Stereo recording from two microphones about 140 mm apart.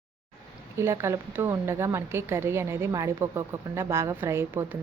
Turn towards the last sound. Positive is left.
turn(degrees=-20)  # may be behind; listen again after turning